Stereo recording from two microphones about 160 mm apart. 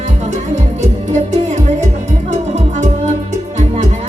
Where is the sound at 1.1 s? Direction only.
45° right (ahead or behind).